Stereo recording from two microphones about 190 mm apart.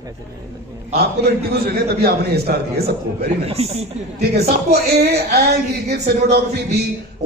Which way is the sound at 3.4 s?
35° right (ahead or behind).